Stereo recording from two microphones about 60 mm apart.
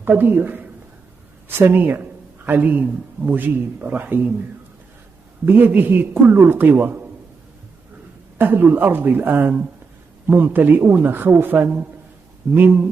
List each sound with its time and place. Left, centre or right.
0.0 s a man's voice: right
5.4 s a man's voice: right
8.4 s a man's voice: right